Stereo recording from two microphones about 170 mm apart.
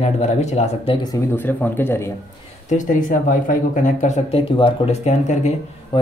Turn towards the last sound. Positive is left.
turn(degrees=30)  # may be behind; listen again after turning